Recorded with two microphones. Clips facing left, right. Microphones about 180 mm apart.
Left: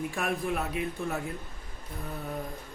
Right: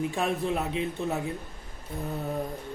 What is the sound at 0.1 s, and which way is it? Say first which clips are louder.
A man's voice: right 3 dB; 20° right (ahead or behind).